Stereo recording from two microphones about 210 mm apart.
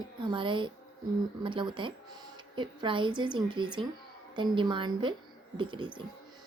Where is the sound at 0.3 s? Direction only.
25° right (ahead or behind).